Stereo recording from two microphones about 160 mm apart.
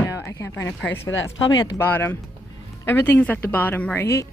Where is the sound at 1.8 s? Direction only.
10° left (ahead or behind).